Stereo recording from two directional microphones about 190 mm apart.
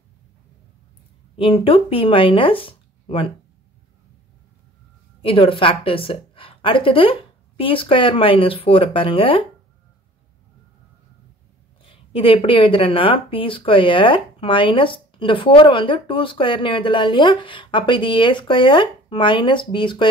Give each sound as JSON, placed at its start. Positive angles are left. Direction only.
{"t": 1.3, "sound": "speech", "side_deg": 30}
{"t": 5.2, "sound": "speech", "side_deg": 30}
{"t": 12.1, "sound": "speech", "side_deg": 30}